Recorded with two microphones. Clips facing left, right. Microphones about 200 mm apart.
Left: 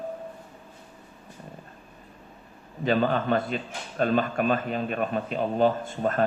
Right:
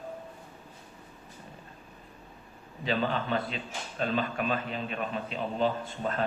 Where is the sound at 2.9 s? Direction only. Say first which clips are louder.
Left 6 dB; 50° left (ahead or behind).